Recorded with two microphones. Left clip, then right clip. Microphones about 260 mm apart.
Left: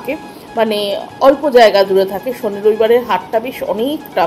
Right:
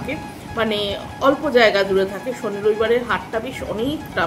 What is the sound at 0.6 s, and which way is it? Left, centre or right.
Speech, centre.